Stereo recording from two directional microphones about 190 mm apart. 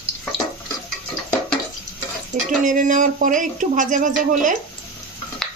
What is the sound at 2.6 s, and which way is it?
Speech, 45° right (ahead or behind).